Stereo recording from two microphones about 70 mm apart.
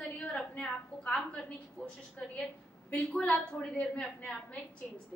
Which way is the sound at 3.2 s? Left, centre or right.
Centre.